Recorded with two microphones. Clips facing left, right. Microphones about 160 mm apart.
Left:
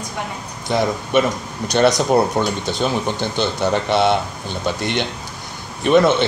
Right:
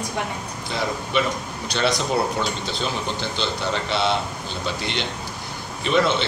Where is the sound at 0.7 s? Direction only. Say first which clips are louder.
Left 7 dB; 55° left (ahead or behind).